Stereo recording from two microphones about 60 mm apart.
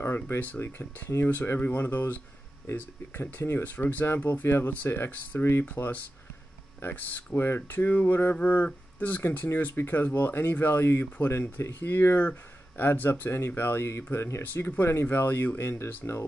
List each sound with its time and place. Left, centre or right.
0.0 s a sound: left
0.4 s speech: left
13.1 s speech: left
14.4 s speech: left